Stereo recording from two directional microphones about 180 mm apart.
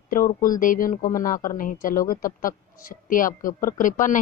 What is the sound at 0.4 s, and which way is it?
Speech, 50° left (ahead or behind).